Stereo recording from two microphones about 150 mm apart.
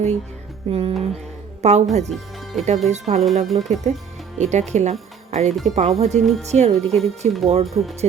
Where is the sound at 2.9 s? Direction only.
50° right (ahead or behind).